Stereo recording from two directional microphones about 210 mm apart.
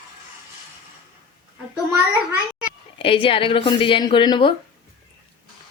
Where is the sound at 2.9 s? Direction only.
25° left (ahead or behind).